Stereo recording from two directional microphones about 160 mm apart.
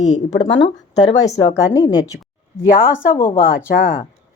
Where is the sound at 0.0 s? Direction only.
45° left (ahead or behind).